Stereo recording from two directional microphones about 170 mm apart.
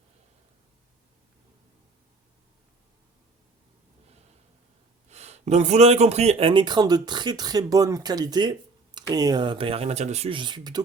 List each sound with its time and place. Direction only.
5.0 s speech: 40° right (ahead or behind); by 10.8 s 25° right (ahead or behind)